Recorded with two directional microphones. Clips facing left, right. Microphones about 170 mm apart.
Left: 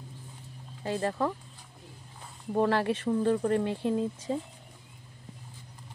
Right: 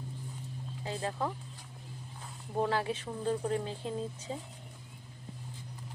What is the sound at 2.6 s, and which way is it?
Speech, 65° left (ahead or behind).